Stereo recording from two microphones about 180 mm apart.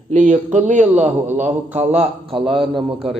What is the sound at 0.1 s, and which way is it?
Speech, 45° right (ahead or behind).